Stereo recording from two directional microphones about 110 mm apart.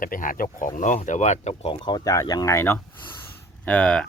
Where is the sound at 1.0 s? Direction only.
90° left.